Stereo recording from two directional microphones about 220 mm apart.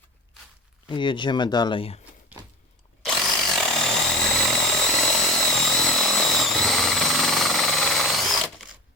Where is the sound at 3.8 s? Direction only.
Centre (ahead or behind).